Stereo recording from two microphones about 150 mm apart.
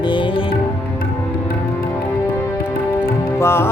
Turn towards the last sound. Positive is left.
turn(degrees=15)  # may be behind; listen again after turning